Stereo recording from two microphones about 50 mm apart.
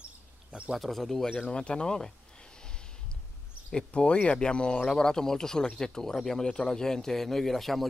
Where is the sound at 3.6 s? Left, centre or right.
Left; by 7.8 s centre.